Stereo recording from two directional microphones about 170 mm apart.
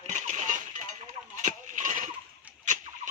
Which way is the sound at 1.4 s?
45° right (ahead or behind).